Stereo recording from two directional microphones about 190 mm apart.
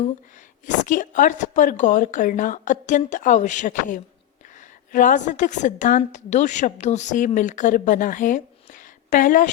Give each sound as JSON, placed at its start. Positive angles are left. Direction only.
{"t": 0.6, "sound": "a woman's voice", "side_deg": 40}